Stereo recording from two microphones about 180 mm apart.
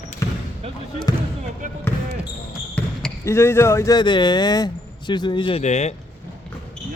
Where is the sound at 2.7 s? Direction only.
5° left (ahead or behind).